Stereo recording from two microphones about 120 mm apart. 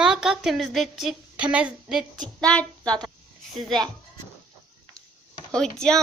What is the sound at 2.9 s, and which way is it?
Child singing, 5° left (ahead or behind).